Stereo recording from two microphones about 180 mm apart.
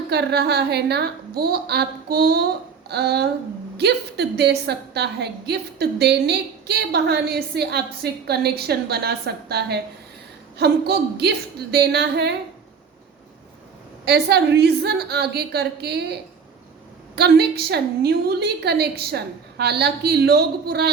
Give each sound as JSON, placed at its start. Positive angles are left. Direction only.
{"t": 0.1, "sound": "a woman's voice", "side_deg": -65}
{"t": 14.0, "sound": "a woman's voice", "side_deg": -65}
{"t": 17.2, "sound": "a woman's voice", "side_deg": -65}